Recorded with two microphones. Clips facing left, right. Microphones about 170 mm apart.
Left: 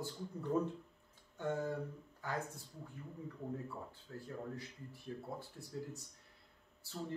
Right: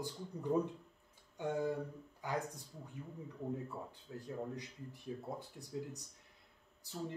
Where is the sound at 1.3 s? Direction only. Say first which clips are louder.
Right 2 dB; 15° right (ahead or behind).